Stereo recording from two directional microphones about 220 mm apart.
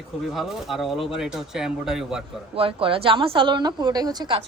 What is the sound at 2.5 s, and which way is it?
A woman's voice, 25° right (ahead or behind).